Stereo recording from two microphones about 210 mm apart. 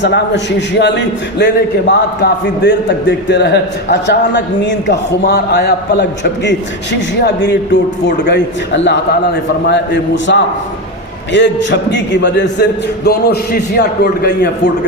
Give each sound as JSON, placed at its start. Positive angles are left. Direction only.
{"t": 0.8, "sound": "a man's voice", "side_deg": 55}